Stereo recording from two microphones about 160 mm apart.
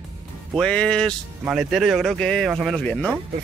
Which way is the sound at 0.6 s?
5° left (ahead or behind).